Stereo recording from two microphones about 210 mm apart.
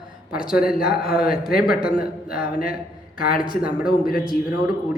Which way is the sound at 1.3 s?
45° left (ahead or behind).